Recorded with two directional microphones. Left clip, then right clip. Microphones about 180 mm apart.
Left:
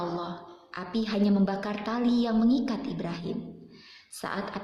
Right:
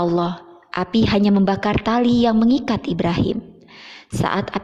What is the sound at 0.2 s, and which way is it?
A woman's voice, 45° right (ahead or behind).